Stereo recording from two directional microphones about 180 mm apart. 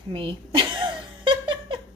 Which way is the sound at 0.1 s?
30° right (ahead or behind).